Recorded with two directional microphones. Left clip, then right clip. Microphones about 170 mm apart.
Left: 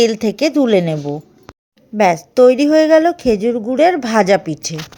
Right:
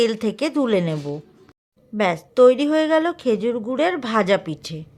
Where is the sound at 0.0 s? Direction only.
10° left (ahead or behind).